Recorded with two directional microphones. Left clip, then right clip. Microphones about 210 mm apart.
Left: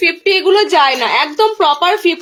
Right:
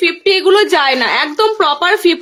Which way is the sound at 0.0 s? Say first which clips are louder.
Even; 20° right (ahead or behind).